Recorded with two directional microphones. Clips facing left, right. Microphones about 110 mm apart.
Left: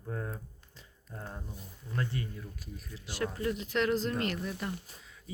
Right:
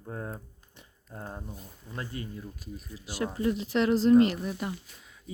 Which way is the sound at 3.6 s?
30° right (ahead or behind).